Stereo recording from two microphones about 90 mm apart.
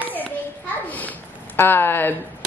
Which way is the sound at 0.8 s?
20° left (ahead or behind).